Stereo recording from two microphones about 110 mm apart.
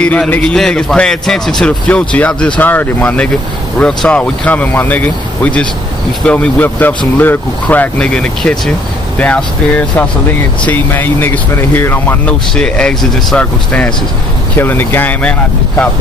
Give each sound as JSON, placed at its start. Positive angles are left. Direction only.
{"t": 0.0, "sound": "a man's voice", "side_deg": 10}
{"t": 12.6, "sound": "a man's voice", "side_deg": 10}